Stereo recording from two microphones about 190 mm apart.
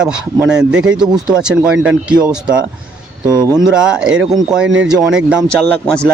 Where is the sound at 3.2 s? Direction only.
20° right (ahead or behind).